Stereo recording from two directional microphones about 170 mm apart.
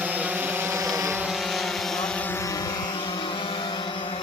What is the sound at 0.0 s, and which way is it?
Vehicle, 10° right (ahead or behind).